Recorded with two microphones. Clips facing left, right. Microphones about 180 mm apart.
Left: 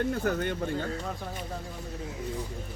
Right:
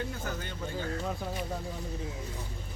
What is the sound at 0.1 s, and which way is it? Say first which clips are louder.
Speech: left 9 dB; 60° left (ahead or behind).